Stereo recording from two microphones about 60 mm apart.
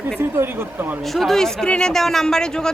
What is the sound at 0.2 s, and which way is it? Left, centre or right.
Speech, right.